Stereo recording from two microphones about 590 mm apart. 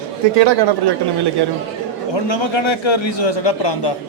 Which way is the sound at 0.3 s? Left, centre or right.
Right.